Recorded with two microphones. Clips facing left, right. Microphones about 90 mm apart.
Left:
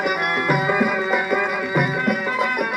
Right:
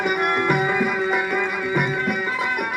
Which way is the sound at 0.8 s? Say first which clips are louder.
Left 1 dB; 15° left (ahead or behind).